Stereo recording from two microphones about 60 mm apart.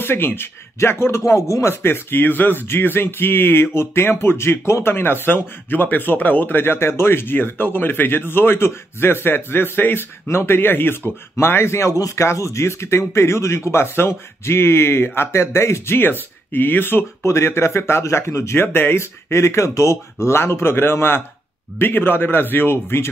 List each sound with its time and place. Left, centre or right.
0.0 s speech: left